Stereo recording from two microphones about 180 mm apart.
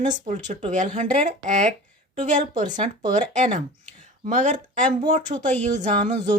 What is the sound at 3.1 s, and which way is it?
Speech, 45° right (ahead or behind).